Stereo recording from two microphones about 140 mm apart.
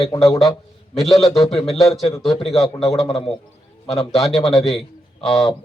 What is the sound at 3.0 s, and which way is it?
Speech, 40° left (ahead or behind).